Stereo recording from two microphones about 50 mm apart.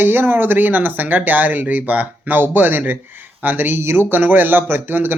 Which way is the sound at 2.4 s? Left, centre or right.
Right.